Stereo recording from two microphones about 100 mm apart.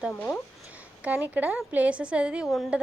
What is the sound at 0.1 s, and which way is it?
Speech, 15° left (ahead or behind).